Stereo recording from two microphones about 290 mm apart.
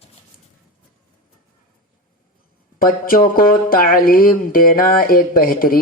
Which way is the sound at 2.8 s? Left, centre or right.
Left.